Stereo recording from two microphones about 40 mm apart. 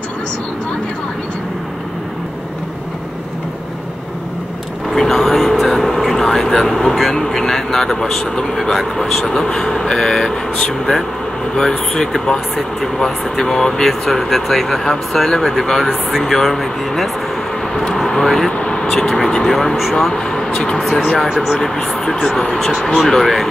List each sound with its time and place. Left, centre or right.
4.8 s speech: centre
17.8 s vehicle: centre
18.6 s vehicle: left
18.9 s speech: centre
20.2 s speech: centre